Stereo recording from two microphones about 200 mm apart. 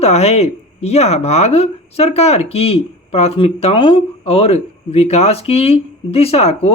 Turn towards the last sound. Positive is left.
turn(degrees=30)  # may be behind; listen again after turning